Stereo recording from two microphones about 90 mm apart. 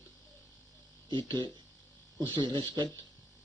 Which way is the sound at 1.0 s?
55° right (ahead or behind).